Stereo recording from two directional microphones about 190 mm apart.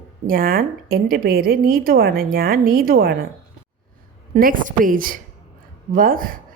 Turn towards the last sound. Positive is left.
turn(degrees=-50)  # may be behind; listen again after turning